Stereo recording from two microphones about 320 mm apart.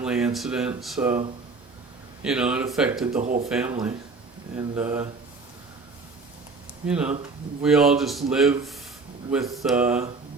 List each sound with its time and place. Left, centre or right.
0.0 s speech: centre
2.2 s speech: centre
3.2 s speech: right
3.4 s speech: centre
6.8 s speech: centre